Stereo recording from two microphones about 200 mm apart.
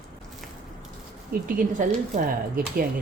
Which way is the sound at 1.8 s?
40° right (ahead or behind).